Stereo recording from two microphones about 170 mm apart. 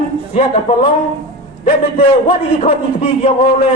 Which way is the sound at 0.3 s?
40° left (ahead or behind).